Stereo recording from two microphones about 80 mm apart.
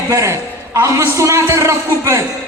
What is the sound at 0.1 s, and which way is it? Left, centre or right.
A man's voice, right.